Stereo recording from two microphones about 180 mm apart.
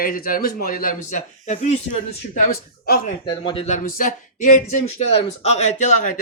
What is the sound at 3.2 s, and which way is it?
Speech, 30° left (ahead or behind).